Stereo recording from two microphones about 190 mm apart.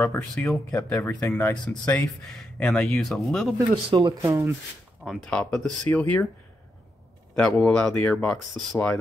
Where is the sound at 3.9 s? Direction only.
20° right (ahead or behind).